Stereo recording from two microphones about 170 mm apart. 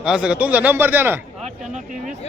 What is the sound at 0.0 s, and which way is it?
A man's voice, 5° right (ahead or behind).